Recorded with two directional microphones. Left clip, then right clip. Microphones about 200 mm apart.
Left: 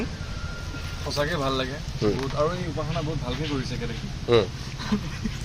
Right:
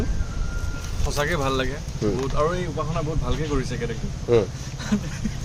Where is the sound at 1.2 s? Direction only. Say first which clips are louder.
Right 2 dB; 25° right (ahead or behind).